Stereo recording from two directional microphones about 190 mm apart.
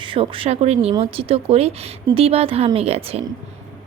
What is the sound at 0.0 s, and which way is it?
Speech, 25° right (ahead or behind).